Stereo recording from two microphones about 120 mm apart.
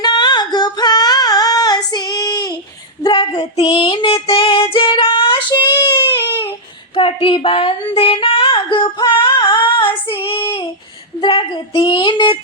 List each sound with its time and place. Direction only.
0.0 s female singing: 35° left (ahead or behind)
3.0 s child singing: 45° left (ahead or behind)
6.9 s a sound: 45° left (ahead or behind)
11.2 s speech: 40° left (ahead or behind)